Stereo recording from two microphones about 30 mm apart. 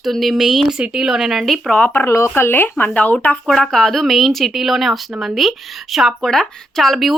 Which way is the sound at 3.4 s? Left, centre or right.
Centre.